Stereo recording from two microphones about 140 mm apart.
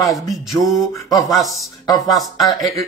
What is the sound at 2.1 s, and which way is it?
Speech, centre (ahead or behind).